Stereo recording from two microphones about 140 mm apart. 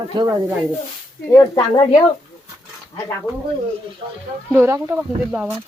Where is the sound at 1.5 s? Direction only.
40° left (ahead or behind).